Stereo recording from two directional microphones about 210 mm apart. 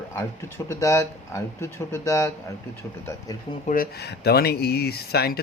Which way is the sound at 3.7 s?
45° left (ahead or behind).